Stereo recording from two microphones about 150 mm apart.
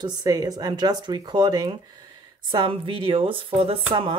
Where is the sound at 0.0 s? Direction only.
25° right (ahead or behind).